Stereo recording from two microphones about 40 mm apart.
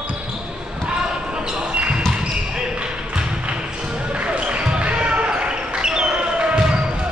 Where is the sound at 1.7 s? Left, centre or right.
Right.